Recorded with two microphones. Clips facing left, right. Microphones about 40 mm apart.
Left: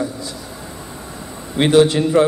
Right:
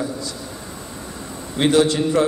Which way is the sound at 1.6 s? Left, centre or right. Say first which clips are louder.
Left 4 dB; left.